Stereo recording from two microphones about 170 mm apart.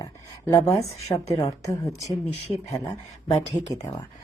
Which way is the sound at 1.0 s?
40° left (ahead or behind).